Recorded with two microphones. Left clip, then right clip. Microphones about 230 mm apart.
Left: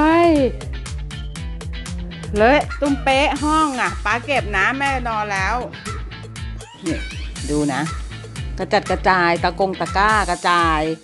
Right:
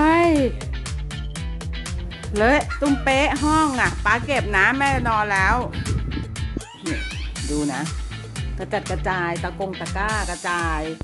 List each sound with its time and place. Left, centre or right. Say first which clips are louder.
0.0 s music: left 3 dB; centre
2.3 s speech: left 4 dB; centre
6.8 s music: left 3 dB; centre
8.5 s speech: left 8 dB; centre